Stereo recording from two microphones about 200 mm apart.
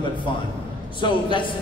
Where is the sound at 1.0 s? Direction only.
20° left (ahead or behind).